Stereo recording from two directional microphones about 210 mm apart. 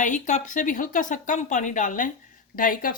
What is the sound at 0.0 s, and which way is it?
Speech, 35° left (ahead or behind).